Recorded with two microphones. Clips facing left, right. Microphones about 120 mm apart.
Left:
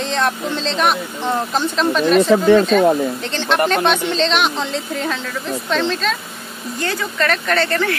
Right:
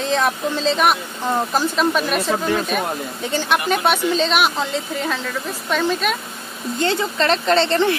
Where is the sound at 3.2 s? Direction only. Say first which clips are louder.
Left 2 dB; 10° right (ahead or behind).